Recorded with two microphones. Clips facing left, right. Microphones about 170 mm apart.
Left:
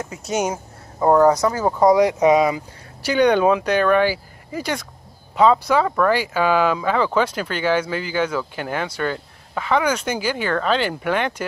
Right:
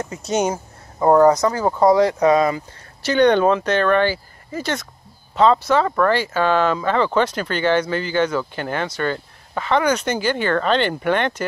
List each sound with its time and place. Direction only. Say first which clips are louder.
0.0 s speech: right 2 dB; 5° left (ahead or behind)